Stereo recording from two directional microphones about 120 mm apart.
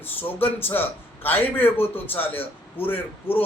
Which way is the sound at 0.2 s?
15° left (ahead or behind).